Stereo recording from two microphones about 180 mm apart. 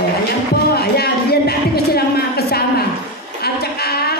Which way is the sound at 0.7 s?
60° left (ahead or behind).